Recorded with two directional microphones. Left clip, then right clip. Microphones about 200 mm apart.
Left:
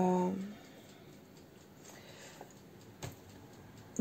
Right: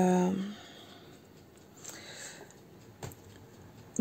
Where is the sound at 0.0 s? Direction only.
35° right (ahead or behind).